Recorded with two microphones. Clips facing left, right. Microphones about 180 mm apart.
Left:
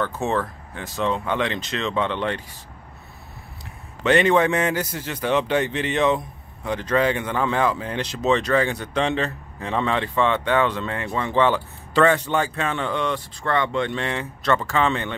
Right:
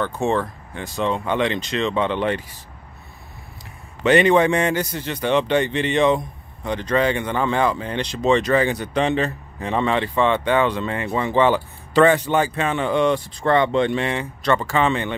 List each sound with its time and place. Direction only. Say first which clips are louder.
0.0 s a man's voice: right 2 dB; centre (ahead or behind)
4.0 s a man's voice: right 2 dB; centre (ahead or behind); by 13.9 s 20° right (ahead or behind)
13.9 s a man's voice: right 4 dB; 5° right (ahead or behind)